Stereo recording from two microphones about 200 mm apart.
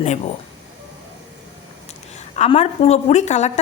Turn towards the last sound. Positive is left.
turn(degrees=35)  # may be behind; listen again after turning